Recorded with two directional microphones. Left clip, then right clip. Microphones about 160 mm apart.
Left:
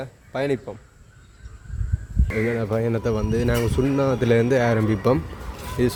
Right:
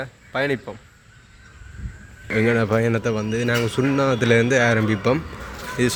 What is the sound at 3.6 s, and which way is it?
Speech, 15° left (ahead or behind).